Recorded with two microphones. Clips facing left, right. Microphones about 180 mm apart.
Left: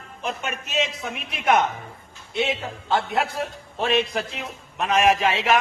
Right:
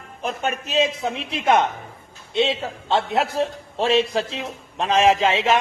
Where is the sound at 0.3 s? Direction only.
35° right (ahead or behind).